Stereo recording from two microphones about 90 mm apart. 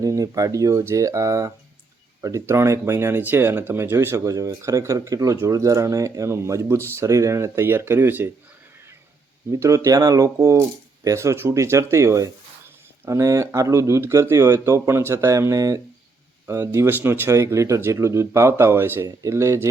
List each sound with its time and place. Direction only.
0.0 s speech: 40° right (ahead or behind)
9.5 s speech: 35° right (ahead or behind)